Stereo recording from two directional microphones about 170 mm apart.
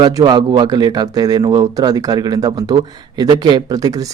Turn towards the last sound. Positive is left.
turn(degrees=-25)  # may be behind; listen again after turning